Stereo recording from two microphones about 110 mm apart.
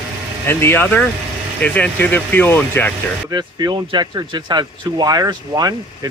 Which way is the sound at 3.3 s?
35° right (ahead or behind).